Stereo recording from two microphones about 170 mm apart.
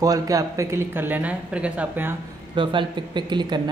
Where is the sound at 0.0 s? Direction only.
20° right (ahead or behind).